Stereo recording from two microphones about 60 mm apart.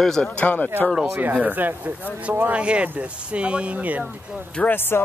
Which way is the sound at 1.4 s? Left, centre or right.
Right.